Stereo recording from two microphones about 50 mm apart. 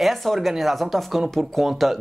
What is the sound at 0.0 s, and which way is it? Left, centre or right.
Speech, centre.